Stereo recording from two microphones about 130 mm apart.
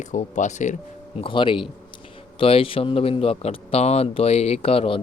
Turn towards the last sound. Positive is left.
turn(degrees=45)  # may be behind; listen again after turning